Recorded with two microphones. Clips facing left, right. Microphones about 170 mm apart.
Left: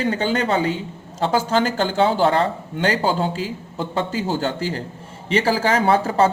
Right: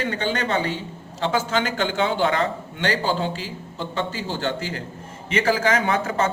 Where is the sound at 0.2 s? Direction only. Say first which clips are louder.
Left 4 dB; 40° left (ahead or behind).